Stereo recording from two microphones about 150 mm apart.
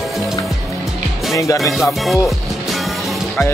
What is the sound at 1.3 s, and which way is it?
Speech, 20° left (ahead or behind).